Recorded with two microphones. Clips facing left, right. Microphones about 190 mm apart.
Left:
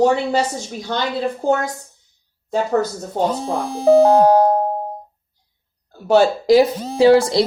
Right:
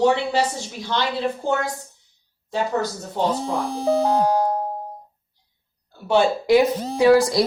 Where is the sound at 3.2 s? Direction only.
45° left (ahead or behind).